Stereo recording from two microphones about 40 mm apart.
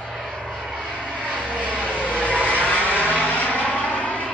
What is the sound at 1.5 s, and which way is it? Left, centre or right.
Vehicle, left.